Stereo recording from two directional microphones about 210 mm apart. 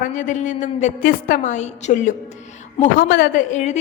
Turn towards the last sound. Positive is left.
turn(degrees=35)  # may be behind; listen again after turning